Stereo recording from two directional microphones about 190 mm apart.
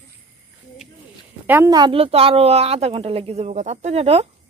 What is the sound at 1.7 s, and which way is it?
A woman's voice, 25° right (ahead or behind).